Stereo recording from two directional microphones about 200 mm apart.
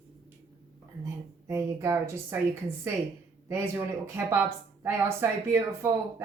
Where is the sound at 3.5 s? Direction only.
10° right (ahead or behind).